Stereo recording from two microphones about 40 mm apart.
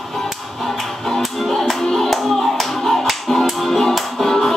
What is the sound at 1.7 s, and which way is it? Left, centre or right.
Music, centre.